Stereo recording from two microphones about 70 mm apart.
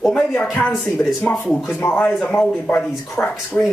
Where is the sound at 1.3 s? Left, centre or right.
Left.